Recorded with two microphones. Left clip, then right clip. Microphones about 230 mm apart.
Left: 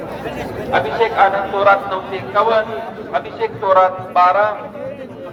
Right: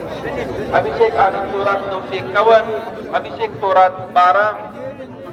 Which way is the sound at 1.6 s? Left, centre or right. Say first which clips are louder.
Left 8 dB; right.